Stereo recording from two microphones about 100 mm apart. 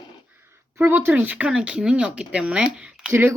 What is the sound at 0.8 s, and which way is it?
Speech, 20° right (ahead or behind).